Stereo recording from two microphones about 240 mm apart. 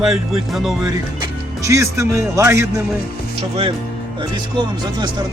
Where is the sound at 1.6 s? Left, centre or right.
Centre.